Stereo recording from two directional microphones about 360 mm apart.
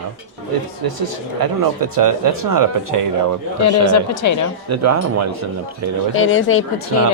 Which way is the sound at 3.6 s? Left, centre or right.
Left.